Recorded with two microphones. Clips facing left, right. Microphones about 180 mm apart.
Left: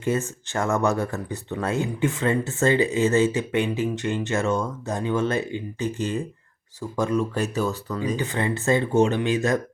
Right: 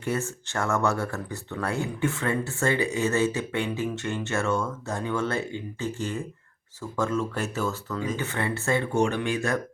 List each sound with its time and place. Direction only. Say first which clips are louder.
0.0 s speech: left 4 dB; 20° left (ahead or behind)